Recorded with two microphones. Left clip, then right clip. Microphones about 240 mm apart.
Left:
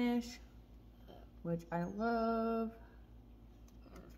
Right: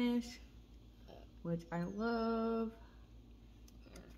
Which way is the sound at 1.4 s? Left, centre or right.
Centre.